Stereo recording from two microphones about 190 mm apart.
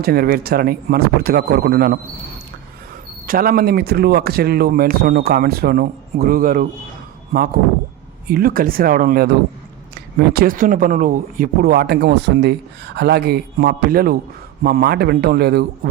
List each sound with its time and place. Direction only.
0.0 s a man's voice: 55° right (ahead or behind)
3.2 s a man's voice: 50° right (ahead or behind)
10.3 s a man's voice: 50° right (ahead or behind)